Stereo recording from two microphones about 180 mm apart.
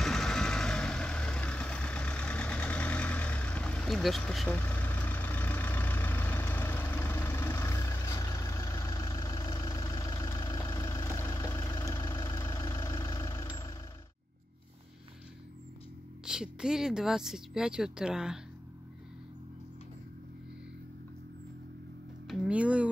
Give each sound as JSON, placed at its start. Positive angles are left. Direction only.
{"t": 0.0, "sound": "vehicle", "side_deg": 5}
{"t": 16.3, "sound": "speech", "side_deg": -5}
{"t": 22.3, "sound": "a sound", "side_deg": -5}